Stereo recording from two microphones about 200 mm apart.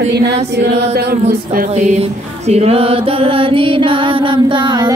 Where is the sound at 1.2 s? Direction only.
40° right (ahead or behind).